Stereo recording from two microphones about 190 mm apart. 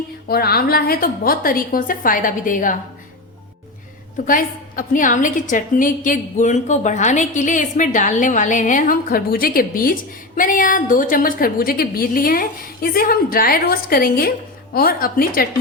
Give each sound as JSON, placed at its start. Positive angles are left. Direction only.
{"t": 0.3, "sound": "a woman's voice", "side_deg": 55}
{"t": 4.3, "sound": "a woman's voice", "side_deg": 45}